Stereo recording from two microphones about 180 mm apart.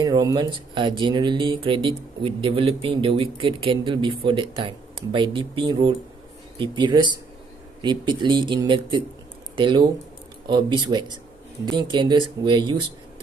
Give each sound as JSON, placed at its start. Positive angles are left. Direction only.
{"t": 0.0, "sound": "speech", "side_deg": -20}